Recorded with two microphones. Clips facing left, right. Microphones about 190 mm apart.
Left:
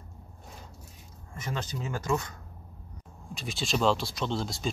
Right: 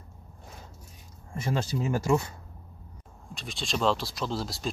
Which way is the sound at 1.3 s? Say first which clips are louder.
Right 6 dB; 30° right (ahead or behind).